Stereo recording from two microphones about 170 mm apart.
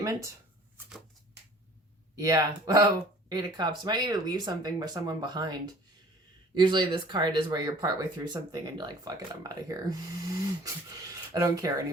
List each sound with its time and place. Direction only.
0.0 s speech: 20° right (ahead or behind)
2.1 s speech: 20° right (ahead or behind)